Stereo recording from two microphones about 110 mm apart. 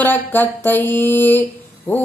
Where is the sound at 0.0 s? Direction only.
15° left (ahead or behind).